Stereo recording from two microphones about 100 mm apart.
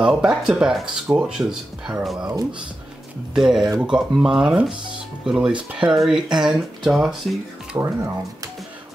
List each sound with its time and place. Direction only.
0.0 s speech: 5° right (ahead or behind)
3.3 s speech: 5° right (ahead or behind)
7.7 s speech: 25° right (ahead or behind)